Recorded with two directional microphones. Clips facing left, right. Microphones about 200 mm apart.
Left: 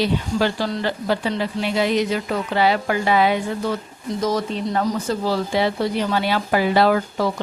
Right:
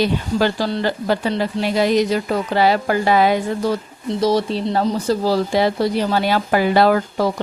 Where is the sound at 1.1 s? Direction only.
40° right (ahead or behind).